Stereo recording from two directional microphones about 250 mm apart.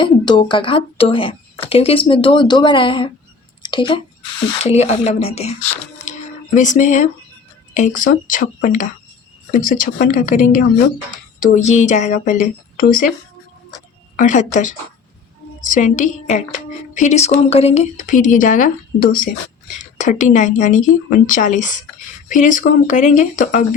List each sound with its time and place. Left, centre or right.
0.0 s speech: centre
6.1 s a sound: left
7.7 s a woman's voice: left
14.2 s a woman's voice: left